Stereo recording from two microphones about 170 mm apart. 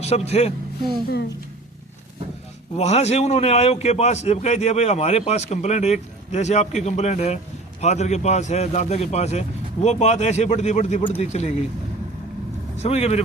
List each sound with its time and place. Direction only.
0.0 s a man's voice: 40° left (ahead or behind)
2.7 s a man's voice: 40° left (ahead or behind)
12.8 s a man's voice: 35° left (ahead or behind)